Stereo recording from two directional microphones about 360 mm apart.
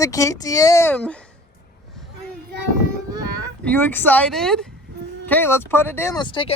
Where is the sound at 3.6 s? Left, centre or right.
Centre.